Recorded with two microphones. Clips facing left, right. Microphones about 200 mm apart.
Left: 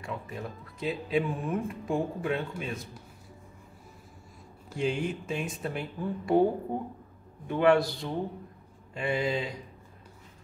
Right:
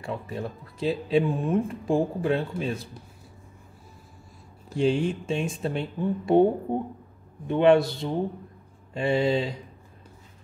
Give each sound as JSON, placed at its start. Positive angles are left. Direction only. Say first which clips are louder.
{"t": 0.0, "sound": "speech", "louder": "right 5 dB", "side_deg": -30}
{"t": 4.7, "sound": "speech", "louder": "right 6 dB", "side_deg": -30}